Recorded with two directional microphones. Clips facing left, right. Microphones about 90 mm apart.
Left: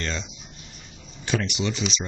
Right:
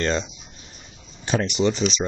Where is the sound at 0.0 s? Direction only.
40° right (ahead or behind).